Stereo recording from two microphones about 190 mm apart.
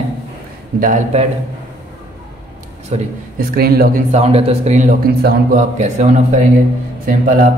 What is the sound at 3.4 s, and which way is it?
Speech, 50° right (ahead or behind).